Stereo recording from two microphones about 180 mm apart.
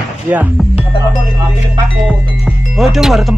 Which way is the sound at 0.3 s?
10° right (ahead or behind).